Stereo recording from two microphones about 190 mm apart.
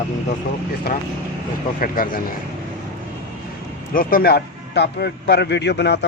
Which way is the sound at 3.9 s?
50° left (ahead or behind).